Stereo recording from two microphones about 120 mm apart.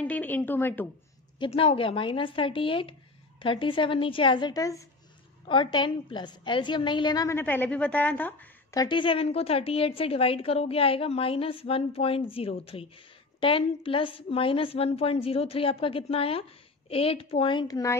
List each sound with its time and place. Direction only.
0.0 s a woman's voice: 15° left (ahead or behind)
1.5 s a woman's voice: 55° left (ahead or behind); by 4.8 s 30° left (ahead or behind)
5.5 s a woman's voice: 45° left (ahead or behind)
7.2 s a woman's voice: 20° left (ahead or behind)
8.7 s a woman's voice: 40° left (ahead or behind)